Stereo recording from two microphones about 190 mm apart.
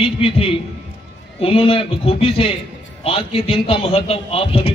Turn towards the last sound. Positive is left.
turn(degrees=30)  # may be behind; listen again after turning